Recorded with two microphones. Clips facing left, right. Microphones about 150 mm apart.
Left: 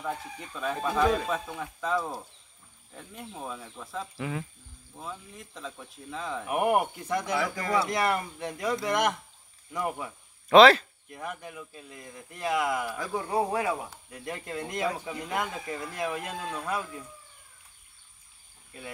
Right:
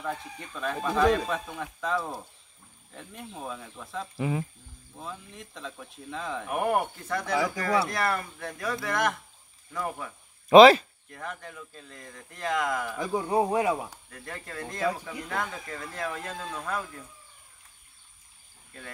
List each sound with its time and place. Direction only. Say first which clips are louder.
0.0 s speech: even; 5° left (ahead or behind)
4.2 s speech: right 6 dB; 20° right (ahead or behind)
4.9 s speech: even; centre (ahead or behind)
6.5 s speech: left 2 dB; 15° left (ahead or behind)
10.5 s speech: right 3 dB; 10° right (ahead or behind)
11.1 s speech: left 1 dB; 10° left (ahead or behind)
13.0 s speech: right 5 dB; 20° right (ahead or behind)
14.1 s speech: left 5 dB; 15° left (ahead or behind)